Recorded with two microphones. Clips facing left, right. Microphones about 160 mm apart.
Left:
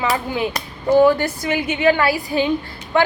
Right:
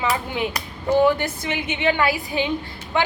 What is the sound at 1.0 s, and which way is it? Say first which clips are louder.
A woman's voice: left 4 dB; 20° right (ahead or behind).